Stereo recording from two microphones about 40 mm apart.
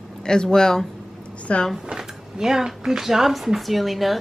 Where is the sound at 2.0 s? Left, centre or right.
Centre.